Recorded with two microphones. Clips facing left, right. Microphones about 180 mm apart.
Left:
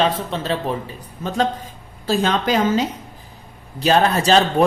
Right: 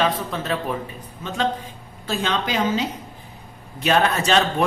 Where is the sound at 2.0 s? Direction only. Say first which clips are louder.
Left 5 dB; 40° left (ahead or behind).